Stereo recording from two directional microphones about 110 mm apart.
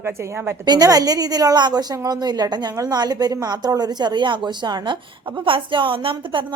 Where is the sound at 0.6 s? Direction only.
35° right (ahead or behind).